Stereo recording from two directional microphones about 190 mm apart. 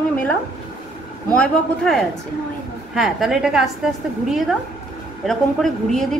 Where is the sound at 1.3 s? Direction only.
5° left (ahead or behind).